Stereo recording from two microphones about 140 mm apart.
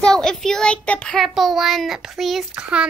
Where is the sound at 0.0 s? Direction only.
5° left (ahead or behind).